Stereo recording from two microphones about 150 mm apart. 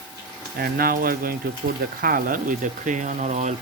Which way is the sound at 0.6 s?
80° right.